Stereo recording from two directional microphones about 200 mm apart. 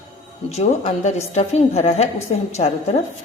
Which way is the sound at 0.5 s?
35° left (ahead or behind).